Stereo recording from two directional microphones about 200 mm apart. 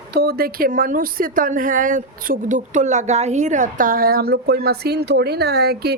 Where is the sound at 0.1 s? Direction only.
50° right (ahead or behind).